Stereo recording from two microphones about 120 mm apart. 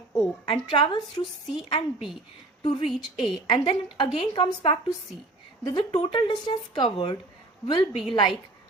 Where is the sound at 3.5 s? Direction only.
45° left (ahead or behind).